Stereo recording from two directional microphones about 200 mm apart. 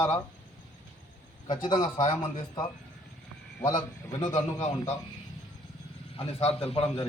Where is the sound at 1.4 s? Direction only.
25° left (ahead or behind).